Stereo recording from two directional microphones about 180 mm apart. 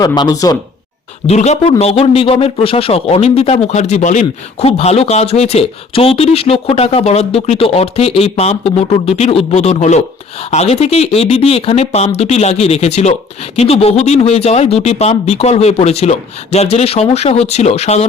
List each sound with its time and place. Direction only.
0.0 s speech: 20° left (ahead or behind)
1.3 s a man's voice: 40° left (ahead or behind)